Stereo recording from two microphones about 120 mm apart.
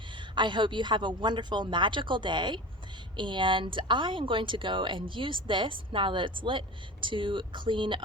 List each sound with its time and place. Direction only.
0.2 s speech: 40° right (ahead or behind)